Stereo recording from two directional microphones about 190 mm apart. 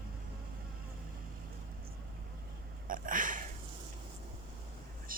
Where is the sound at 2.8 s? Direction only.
45° right (ahead or behind).